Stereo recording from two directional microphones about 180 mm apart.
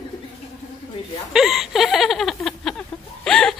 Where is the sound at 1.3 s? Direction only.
Centre (ahead or behind).